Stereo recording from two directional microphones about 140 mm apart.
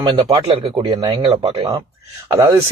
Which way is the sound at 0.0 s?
35° right (ahead or behind).